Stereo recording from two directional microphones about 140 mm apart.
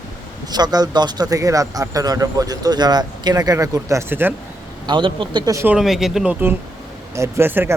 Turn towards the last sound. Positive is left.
turn(degrees=-15)  # may be behind; listen again after turning